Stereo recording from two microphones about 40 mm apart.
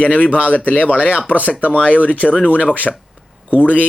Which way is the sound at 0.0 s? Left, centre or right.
Left.